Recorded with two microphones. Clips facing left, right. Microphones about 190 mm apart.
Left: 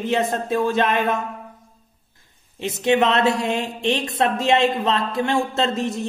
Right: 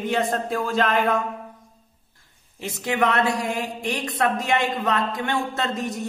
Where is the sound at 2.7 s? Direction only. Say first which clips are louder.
Left 5 dB; 25° left (ahead or behind).